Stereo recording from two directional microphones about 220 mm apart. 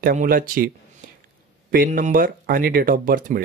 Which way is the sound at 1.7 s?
40° right (ahead or behind).